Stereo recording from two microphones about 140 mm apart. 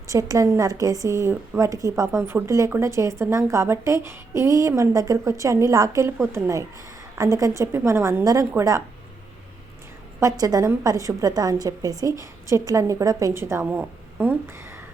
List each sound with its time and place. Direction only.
0.1 s a woman's voice: 25° right (ahead or behind)
10.2 s a woman's voice: 25° right (ahead or behind)